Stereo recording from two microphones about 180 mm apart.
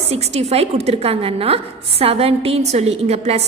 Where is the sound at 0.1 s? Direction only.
35° right (ahead or behind).